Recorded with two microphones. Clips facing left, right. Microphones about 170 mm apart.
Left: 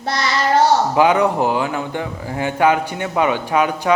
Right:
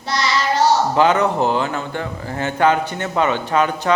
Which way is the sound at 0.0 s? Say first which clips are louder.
Left 1 dB; 55° left (ahead or behind).